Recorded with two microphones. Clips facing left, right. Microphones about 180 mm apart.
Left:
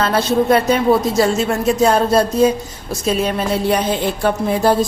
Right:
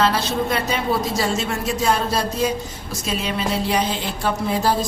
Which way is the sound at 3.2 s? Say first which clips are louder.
Left 5 dB; 55° left (ahead or behind).